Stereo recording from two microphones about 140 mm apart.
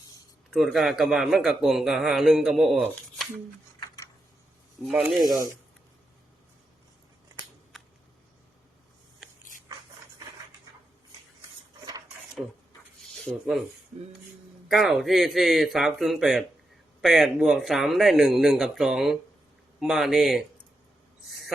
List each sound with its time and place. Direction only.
0.5 s a man's voice: centre (ahead or behind)
4.9 s a man's voice: 5° right (ahead or behind)
5.2 s speech: 25° right (ahead or behind)
7.7 s a sound: centre (ahead or behind)
13.0 s a sound: centre (ahead or behind)
14.7 s a man's voice: centre (ahead or behind)
21.2 s owl: centre (ahead or behind)